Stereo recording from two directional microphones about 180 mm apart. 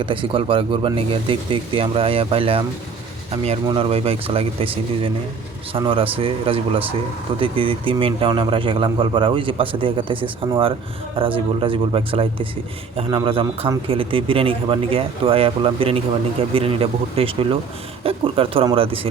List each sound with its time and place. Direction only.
0.0 s a man's voice: 30° right (ahead or behind)
3.7 s a man's voice: 30° right (ahead or behind)